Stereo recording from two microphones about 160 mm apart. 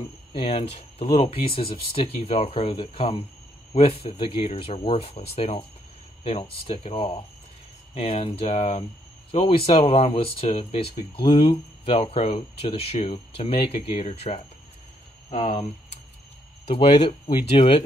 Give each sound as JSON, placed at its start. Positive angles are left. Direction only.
{"t": 0.3, "sound": "speech", "side_deg": 35}
{"t": 17.3, "sound": "speech", "side_deg": 35}